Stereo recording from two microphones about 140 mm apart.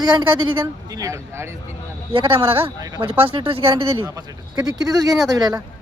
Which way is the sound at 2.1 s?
40° right (ahead or behind).